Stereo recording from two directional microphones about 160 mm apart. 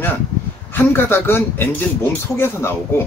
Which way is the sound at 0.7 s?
15° left (ahead or behind).